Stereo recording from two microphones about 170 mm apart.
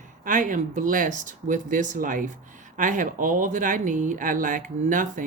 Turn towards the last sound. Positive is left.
turn(degrees=-50)  # may be behind; listen again after turning